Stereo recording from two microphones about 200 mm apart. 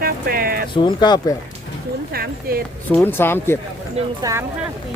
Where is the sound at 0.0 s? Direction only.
50° right (ahead or behind).